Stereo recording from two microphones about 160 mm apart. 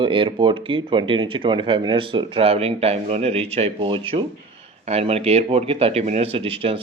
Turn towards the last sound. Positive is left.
turn(degrees=-35)  # may be behind; listen again after turning